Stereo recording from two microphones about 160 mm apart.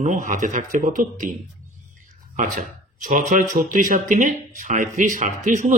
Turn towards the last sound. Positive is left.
turn(degrees=-50)  # may be behind; listen again after turning